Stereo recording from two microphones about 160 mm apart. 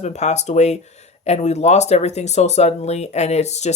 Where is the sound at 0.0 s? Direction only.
45° left (ahead or behind).